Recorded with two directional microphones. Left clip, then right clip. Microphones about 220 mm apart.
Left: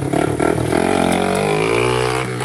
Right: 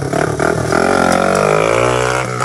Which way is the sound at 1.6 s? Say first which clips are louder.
Right 4 dB; 50° right (ahead or behind).